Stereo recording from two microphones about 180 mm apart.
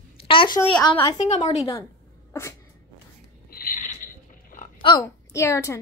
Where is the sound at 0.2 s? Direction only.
30° left (ahead or behind).